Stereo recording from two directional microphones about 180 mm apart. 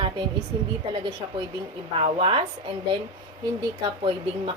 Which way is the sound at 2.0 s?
30° right (ahead or behind).